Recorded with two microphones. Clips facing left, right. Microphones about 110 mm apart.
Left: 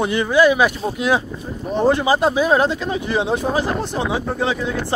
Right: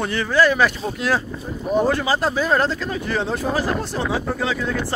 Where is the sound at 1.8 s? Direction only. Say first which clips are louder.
Left 4 dB; 20° left (ahead or behind).